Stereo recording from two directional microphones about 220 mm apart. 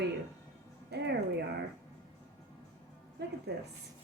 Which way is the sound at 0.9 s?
50° right (ahead or behind).